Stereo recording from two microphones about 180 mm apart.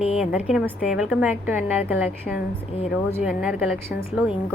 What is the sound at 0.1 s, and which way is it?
A woman's voice, 5° right (ahead or behind).